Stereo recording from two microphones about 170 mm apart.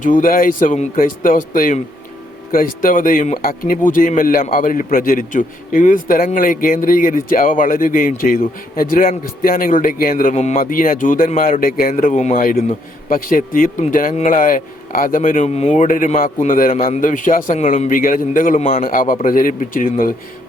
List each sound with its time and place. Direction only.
0.0 s a man's voice: 50° left (ahead or behind)
10.3 s speech: 40° left (ahead or behind)
10.6 s a man's voice: 55° left (ahead or behind)